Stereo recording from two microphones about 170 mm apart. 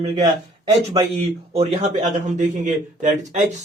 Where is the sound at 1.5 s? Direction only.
35° right (ahead or behind).